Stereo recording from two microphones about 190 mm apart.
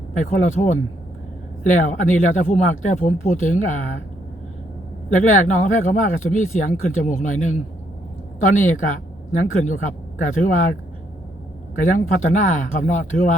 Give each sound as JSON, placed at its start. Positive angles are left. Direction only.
{"t": 0.2, "sound": "speech", "side_deg": 45}
{"t": 5.1, "sound": "speech", "side_deg": 40}
{"t": 11.9, "sound": "speech", "side_deg": 40}